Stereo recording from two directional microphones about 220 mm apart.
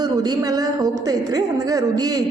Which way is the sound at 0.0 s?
20° right (ahead or behind).